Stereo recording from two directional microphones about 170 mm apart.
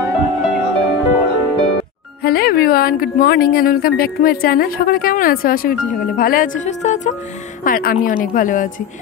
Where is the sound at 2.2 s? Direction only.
60° left (ahead or behind); by 7.1 s 45° left (ahead or behind).